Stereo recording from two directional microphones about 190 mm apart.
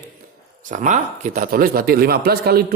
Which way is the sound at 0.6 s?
45° right (ahead or behind).